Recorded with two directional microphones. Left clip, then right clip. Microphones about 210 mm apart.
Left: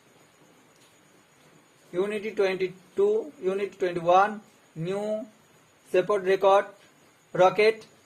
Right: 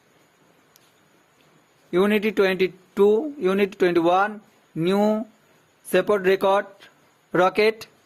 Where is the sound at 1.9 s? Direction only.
55° right (ahead or behind).